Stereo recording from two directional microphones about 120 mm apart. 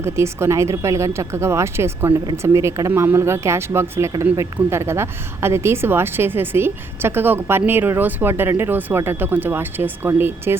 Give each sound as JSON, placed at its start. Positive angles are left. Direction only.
{"t": 0.0, "sound": "a woman's voice", "side_deg": -20}